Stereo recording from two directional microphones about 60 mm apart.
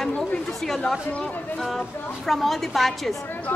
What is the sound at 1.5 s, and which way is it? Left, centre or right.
A woman's voice, centre.